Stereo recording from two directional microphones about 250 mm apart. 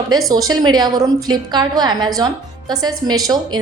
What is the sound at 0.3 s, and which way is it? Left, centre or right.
A woman's voice, centre.